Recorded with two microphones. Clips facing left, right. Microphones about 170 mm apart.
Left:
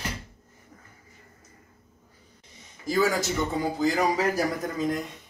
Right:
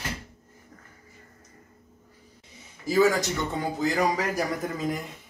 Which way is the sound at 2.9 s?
Centre (ahead or behind).